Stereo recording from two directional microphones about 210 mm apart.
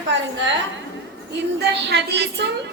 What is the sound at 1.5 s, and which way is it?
Speech, 50° right (ahead or behind).